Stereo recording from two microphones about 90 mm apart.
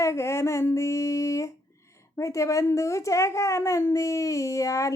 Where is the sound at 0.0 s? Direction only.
30° left (ahead or behind).